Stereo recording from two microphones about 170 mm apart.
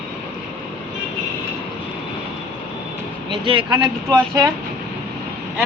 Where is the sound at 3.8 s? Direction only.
20° right (ahead or behind).